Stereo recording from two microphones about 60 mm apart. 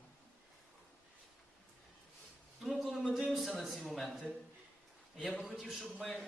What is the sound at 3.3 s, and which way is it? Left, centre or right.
A man's voice, centre.